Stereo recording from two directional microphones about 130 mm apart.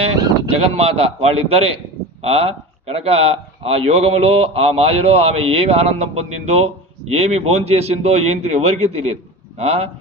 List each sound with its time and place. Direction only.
0.5 s a man's voice: 50° right (ahead or behind)